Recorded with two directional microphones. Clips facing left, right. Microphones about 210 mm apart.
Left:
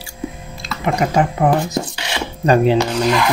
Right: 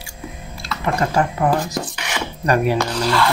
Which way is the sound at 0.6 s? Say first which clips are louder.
Left 2 dB; 20° left (ahead or behind).